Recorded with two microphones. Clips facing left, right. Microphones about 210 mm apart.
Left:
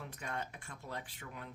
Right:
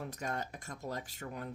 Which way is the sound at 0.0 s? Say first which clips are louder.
Right 4 dB; 40° right (ahead or behind).